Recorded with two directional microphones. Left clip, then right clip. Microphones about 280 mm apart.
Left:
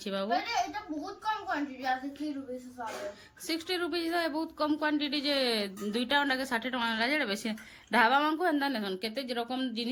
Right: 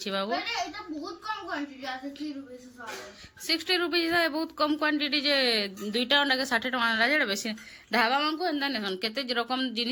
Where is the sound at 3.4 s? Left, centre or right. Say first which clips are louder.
Right 6 dB; centre.